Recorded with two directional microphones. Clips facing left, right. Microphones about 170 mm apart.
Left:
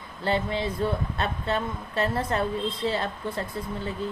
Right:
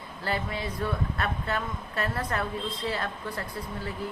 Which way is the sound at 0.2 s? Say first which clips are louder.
Left 5 dB; 25° left (ahead or behind).